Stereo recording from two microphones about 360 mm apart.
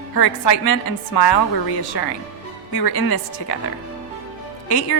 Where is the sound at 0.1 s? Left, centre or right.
Left.